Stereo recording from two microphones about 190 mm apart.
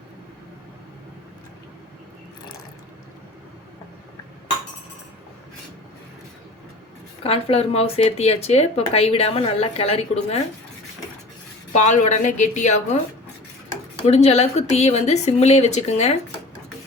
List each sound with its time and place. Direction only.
7.2 s speech: 30° left (ahead or behind)
11.7 s speech: 35° left (ahead or behind)
14.1 s speech: 35° left (ahead or behind)